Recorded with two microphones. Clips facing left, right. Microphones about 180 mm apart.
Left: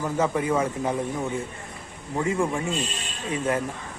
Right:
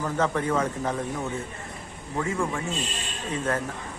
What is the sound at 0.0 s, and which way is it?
Speech, 10° left (ahead or behind).